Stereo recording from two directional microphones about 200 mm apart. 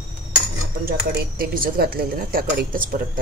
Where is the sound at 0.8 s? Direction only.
50° right (ahead or behind).